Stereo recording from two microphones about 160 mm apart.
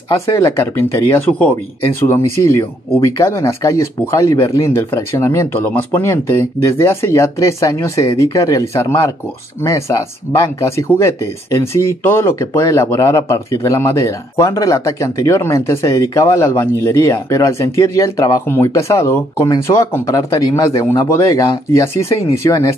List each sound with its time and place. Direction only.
0.1 s speech: 20° left (ahead or behind)